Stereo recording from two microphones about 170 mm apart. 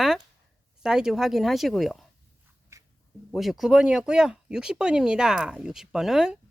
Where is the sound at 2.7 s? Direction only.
15° right (ahead or behind).